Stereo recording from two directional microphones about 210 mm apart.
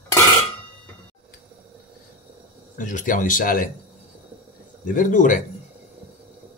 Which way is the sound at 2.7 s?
40° left (ahead or behind).